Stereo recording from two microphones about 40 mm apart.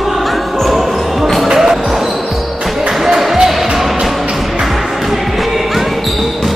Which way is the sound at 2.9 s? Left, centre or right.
Centre.